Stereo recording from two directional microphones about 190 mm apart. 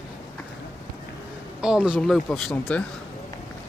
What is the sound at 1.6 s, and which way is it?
Speech, 5° right (ahead or behind).